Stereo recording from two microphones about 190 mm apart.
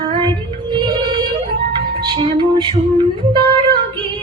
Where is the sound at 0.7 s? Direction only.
25° right (ahead or behind).